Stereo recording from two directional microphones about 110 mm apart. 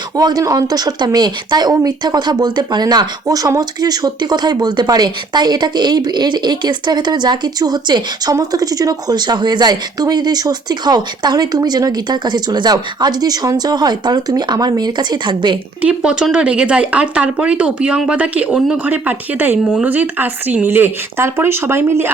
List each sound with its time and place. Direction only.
0.2 s speech: 35° right (ahead or behind)
15.8 s speech: 10° right (ahead or behind)